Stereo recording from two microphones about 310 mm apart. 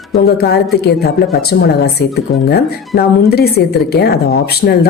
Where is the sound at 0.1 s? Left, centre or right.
Left.